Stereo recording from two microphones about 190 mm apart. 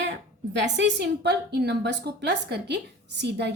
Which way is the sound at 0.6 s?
65° right (ahead or behind).